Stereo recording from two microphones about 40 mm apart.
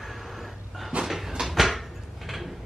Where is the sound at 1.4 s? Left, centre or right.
Centre.